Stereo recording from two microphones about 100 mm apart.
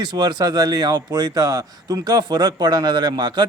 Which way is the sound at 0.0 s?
45° right (ahead or behind).